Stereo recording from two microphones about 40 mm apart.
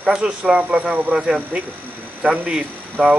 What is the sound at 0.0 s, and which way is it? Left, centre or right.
Speech, right.